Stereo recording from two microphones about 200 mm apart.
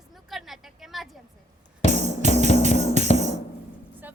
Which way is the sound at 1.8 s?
30° left (ahead or behind).